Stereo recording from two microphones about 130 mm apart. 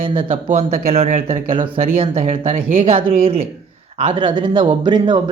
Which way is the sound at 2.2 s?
60° right (ahead or behind).